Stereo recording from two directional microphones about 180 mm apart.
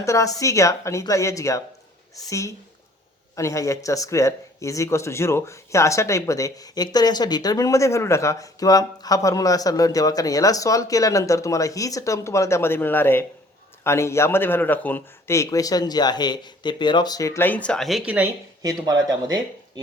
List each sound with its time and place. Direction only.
0.0 s speech: 15° left (ahead or behind); by 18.3 s 10° right (ahead or behind)
18.6 s speech: 20° right (ahead or behind)